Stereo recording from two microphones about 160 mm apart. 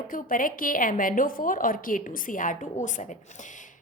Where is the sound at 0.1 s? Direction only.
60° left (ahead or behind).